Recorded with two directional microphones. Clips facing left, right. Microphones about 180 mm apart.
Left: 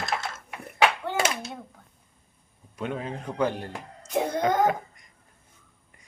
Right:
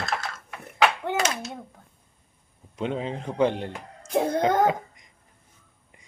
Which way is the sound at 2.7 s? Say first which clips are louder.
Right 3 dB; 25° right (ahead or behind).